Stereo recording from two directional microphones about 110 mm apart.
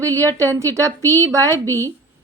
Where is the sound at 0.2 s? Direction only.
30° right (ahead or behind).